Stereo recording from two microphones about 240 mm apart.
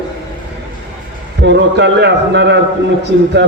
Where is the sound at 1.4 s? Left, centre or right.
Right.